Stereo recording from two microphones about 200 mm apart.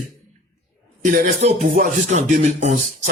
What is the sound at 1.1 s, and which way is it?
Speech, 40° right (ahead or behind).